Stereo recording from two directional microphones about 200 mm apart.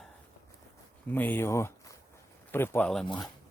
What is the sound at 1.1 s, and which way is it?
A man's voice, 10° left (ahead or behind).